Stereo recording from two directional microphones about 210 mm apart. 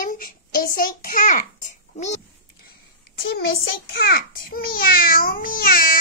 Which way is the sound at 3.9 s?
50° left (ahead or behind).